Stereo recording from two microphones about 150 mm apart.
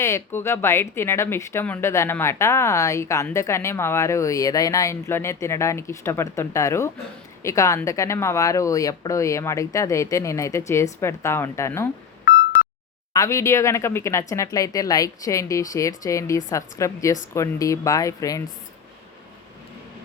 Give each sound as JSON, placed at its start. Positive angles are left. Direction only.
{"t": 0.0, "sound": "speech", "side_deg": 15}
{"t": 13.1, "sound": "speech", "side_deg": 20}